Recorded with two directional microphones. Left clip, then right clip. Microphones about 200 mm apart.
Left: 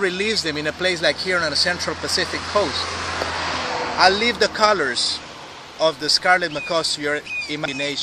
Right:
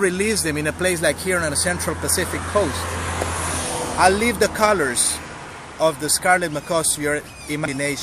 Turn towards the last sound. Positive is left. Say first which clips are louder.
# right 1 dB
turn(degrees=-10)  # may be behind; listen again after turning